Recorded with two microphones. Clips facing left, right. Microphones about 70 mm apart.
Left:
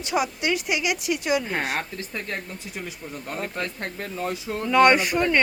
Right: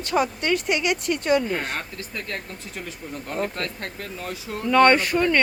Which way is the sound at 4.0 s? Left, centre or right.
Left.